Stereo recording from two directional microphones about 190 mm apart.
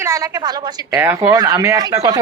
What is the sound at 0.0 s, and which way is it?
A woman's voice, 15° right (ahead or behind).